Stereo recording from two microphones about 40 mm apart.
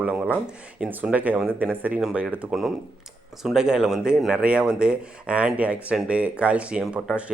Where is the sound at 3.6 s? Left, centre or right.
Centre.